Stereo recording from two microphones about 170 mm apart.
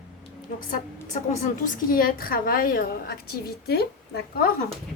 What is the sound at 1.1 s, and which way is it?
A woman's voice, 45° left (ahead or behind).